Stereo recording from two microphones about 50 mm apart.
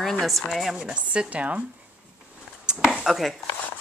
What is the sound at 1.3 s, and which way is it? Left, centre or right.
Speech, right.